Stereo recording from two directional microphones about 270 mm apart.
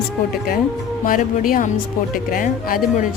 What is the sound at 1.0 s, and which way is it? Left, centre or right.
Speech, left.